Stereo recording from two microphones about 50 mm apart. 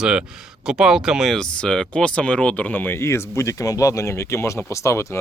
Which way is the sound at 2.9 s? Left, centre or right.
Left.